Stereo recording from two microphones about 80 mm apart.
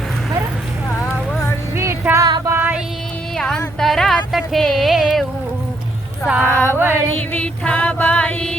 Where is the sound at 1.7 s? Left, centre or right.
Right.